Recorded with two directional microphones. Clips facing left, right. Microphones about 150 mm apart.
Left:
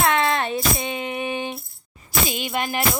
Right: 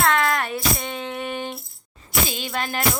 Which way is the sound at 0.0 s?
20° left (ahead or behind).